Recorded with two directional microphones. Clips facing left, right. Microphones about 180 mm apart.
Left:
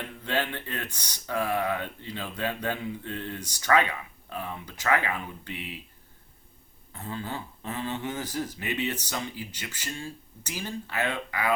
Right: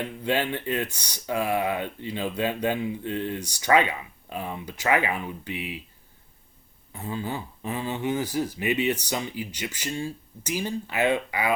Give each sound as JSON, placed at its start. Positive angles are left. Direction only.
{"t": 0.3, "sound": "speech", "side_deg": -15}
{"t": 6.9, "sound": "speech", "side_deg": -15}